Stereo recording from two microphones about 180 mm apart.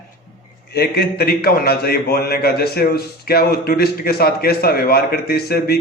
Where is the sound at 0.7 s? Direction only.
60° left (ahead or behind).